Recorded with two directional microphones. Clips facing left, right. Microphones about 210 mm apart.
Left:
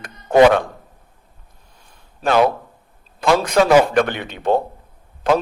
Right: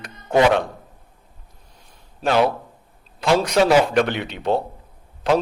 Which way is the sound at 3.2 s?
50° left (ahead or behind).